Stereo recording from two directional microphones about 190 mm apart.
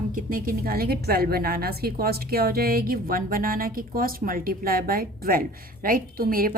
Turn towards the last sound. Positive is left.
turn(degrees=-50)  # may be behind; listen again after turning